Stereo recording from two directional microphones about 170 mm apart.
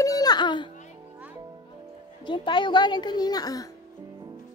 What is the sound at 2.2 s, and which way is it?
A child's voice, 30° left (ahead or behind).